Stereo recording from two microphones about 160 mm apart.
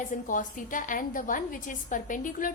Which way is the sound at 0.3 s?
55° left (ahead or behind).